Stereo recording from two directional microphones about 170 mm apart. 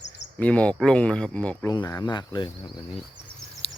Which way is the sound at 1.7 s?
20° left (ahead or behind).